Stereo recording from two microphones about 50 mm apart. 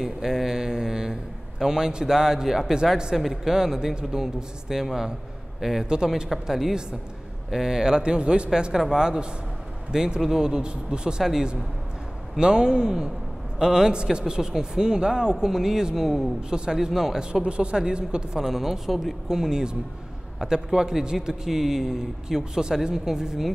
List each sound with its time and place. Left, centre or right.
0.0 s a sound: centre
1.6 s speech: centre
17.3 s speech: right